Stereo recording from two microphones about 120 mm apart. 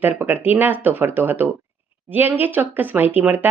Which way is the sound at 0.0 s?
15° right (ahead or behind).